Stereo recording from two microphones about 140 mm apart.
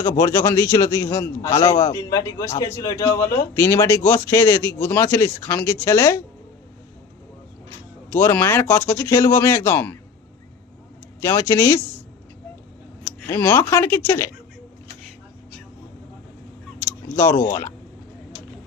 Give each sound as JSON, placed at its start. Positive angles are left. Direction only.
{"t": 0.1, "sound": "a man's voice", "side_deg": 20}
{"t": 8.1, "sound": "a man's voice", "side_deg": 15}
{"t": 11.2, "sound": "a man's voice", "side_deg": 20}
{"t": 13.1, "sound": "speech", "side_deg": 15}
{"t": 17.2, "sound": "a man's voice", "side_deg": 20}